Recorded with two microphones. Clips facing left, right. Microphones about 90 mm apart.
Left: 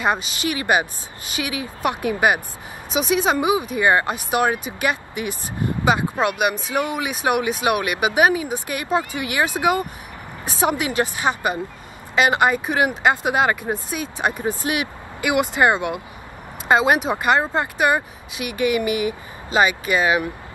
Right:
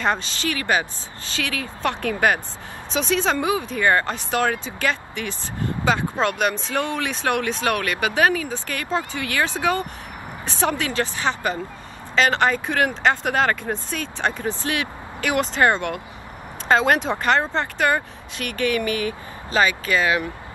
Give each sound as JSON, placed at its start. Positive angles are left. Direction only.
{"t": 0.0, "sound": "speech", "side_deg": 10}